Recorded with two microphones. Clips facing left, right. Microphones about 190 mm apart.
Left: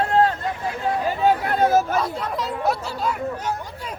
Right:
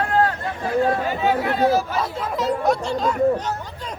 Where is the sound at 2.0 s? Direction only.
Centre (ahead or behind).